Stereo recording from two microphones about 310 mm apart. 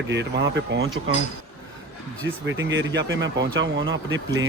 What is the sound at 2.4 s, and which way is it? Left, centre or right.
Speech, right.